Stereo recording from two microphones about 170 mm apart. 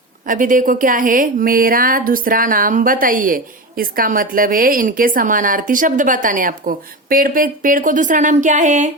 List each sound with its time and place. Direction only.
0.3 s a woman's voice: 50° right (ahead or behind)